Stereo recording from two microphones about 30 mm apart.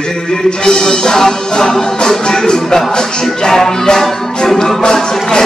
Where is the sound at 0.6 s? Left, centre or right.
Left.